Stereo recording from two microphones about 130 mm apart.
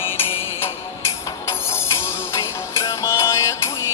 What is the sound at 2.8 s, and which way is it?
Music, 25° left (ahead or behind).